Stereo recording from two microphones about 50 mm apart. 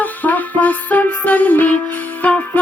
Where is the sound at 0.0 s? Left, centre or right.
Left.